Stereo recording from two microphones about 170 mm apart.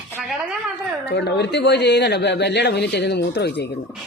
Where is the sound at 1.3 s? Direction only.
80° left.